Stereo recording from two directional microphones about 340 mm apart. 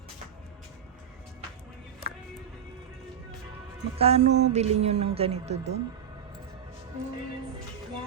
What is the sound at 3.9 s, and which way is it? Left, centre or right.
Music, centre.